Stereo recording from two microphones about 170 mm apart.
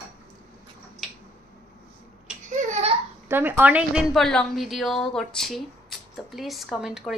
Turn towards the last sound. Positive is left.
turn(degrees=-5)  # may be behind; listen again after turning